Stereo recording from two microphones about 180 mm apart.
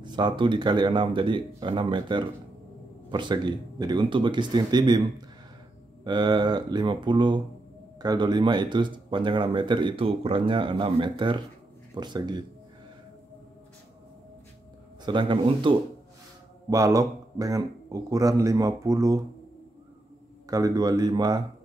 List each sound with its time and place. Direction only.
0.0 s speech: 25° right (ahead or behind)
15.0 s speech: 25° right (ahead or behind)
16.7 s speech: 20° right (ahead or behind)
20.4 s speech: 20° right (ahead or behind)